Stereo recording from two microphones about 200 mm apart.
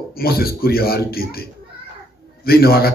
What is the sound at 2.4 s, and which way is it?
Speech, 50° left (ahead or behind).